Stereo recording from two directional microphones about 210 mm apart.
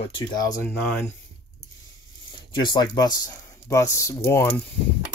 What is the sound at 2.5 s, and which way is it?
Speech, 20° left (ahead or behind).